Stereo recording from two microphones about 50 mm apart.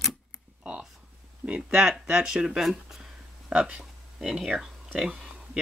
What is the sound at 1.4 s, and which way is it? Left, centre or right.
Speech, right.